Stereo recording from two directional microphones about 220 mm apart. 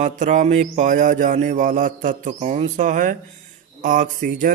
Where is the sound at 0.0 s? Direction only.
35° right (ahead or behind).